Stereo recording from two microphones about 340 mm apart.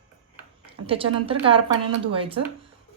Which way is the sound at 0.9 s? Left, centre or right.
Centre.